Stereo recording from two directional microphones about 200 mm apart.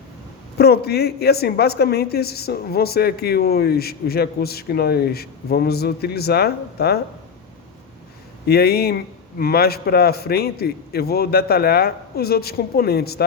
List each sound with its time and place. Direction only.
0.6 s speech: 50° left (ahead or behind)
8.4 s speech: 50° left (ahead or behind)